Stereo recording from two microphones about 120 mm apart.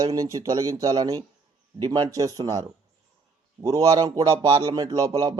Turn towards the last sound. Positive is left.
turn(degrees=-30)  # may be behind; listen again after turning